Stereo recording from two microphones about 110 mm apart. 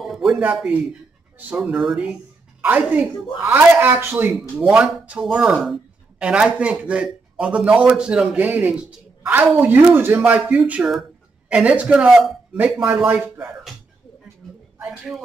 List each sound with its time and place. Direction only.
0.0 s a sound: centre (ahead or behind)
1.5 s speech: 5° right (ahead or behind)
2.6 s speech: 15° right (ahead or behind)
4.3 s speech: 5° right (ahead or behind)
14.4 s a sound: 5° left (ahead or behind)
14.9 s speech: centre (ahead or behind)